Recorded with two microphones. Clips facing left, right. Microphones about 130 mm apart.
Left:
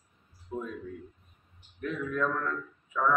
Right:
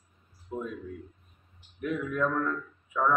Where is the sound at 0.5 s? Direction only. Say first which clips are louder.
Right 1 dB; 15° right (ahead or behind).